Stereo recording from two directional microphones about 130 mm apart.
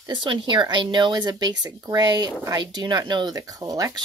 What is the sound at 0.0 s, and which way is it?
Speech, 40° right (ahead or behind).